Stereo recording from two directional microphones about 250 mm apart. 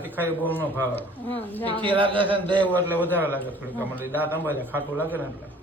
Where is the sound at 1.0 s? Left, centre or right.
Centre.